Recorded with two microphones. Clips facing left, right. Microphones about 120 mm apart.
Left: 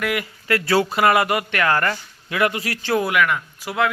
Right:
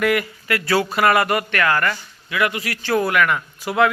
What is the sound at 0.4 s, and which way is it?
Speech, 30° left (ahead or behind).